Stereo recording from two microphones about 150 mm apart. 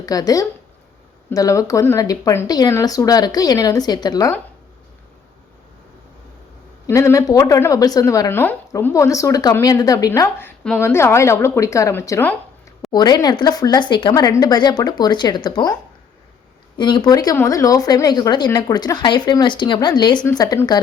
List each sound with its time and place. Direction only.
0.0 s a woman's voice: 25° left (ahead or behind)
6.8 s a woman's voice: 20° left (ahead or behind)
12.9 s a woman's voice: 25° left (ahead or behind)